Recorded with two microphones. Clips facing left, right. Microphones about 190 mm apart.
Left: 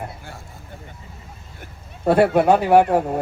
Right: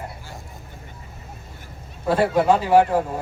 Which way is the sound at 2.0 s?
60° left (ahead or behind).